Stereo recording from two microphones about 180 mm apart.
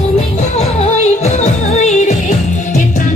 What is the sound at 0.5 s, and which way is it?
Music, 40° left (ahead or behind).